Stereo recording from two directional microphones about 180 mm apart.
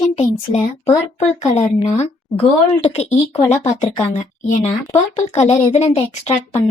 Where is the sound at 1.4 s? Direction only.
40° left (ahead or behind).